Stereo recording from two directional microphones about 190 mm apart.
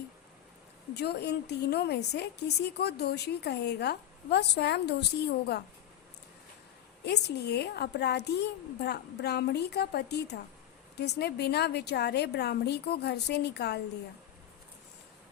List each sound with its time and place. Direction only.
0.9 s a woman's voice: 60° left (ahead or behind)
7.0 s a woman's voice: 60° left (ahead or behind)